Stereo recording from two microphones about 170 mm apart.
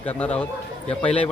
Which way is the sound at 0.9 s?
35° left (ahead or behind).